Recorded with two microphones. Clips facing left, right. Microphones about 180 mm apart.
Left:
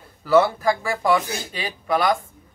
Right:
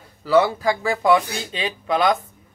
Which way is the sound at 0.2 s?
15° right (ahead or behind).